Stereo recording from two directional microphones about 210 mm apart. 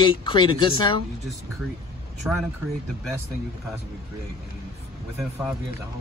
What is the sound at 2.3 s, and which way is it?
Speech, 5° right (ahead or behind).